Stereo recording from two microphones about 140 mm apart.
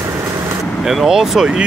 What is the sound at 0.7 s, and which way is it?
Speech, centre (ahead or behind).